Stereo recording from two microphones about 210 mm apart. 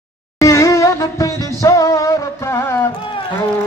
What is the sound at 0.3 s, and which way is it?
Music, 15° left (ahead or behind).